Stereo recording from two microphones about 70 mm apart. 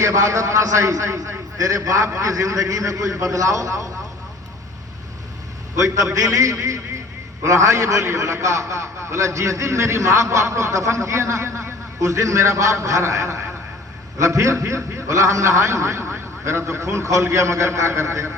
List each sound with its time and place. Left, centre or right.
0.0 s a man's voice: right
5.7 s a man's voice: right